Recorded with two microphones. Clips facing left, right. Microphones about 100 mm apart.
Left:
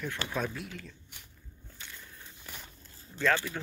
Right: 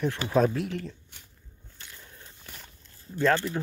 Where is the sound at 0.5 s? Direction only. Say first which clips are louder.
Right 11 dB; 65° right (ahead or behind).